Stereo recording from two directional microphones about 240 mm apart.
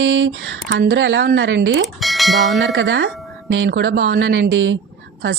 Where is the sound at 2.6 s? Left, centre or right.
Right.